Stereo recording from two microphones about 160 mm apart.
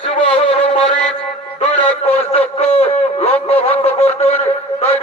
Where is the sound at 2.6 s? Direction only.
45° left (ahead or behind).